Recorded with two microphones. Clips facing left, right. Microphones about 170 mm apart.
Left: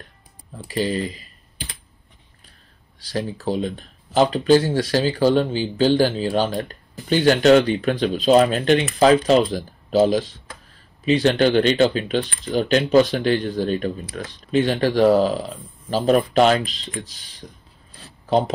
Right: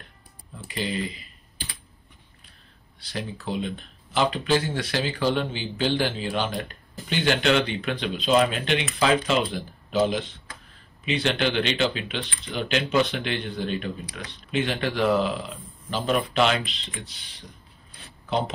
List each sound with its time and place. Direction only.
0.7 s speech: 40° left (ahead or behind)
3.1 s speech: 35° left (ahead or behind)